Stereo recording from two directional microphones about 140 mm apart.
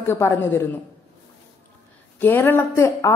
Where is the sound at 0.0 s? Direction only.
15° left (ahead or behind).